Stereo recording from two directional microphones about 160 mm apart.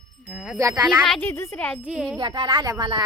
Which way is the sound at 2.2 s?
30° right (ahead or behind).